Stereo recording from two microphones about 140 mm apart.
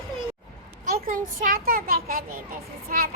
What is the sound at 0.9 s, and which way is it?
A child's voice, 90° right.